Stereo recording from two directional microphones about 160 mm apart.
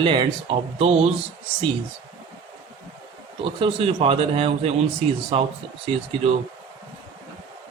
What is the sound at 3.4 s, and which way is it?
Speech, 35° right (ahead or behind).